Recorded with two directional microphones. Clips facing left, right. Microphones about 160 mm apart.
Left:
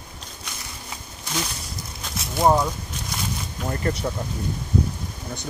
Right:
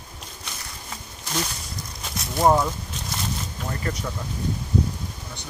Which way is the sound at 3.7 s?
30° left (ahead or behind).